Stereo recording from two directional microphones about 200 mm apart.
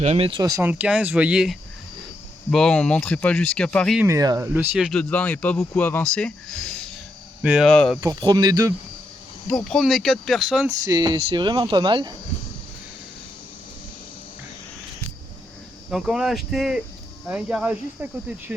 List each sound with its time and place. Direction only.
0.0 s speech: 30° right (ahead or behind); by 4.0 s 5° left (ahead or behind)
4.0 s speech: 15° right (ahead or behind)
4.9 s speech: 5° left (ahead or behind)
8.0 s speech: 15° right (ahead or behind)
9.5 s speech: 5° left (ahead or behind)
10.8 s speech: 20° right (ahead or behind)
15.9 s speech: centre (ahead or behind)